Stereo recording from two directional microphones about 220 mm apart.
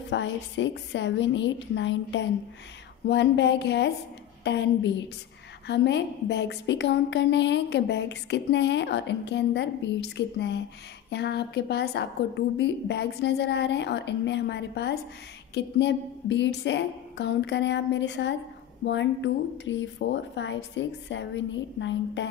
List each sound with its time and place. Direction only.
0.1 s a woman's voice: 55° left (ahead or behind)